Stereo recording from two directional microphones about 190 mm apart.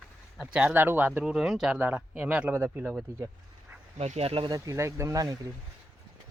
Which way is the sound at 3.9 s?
35° right (ahead or behind).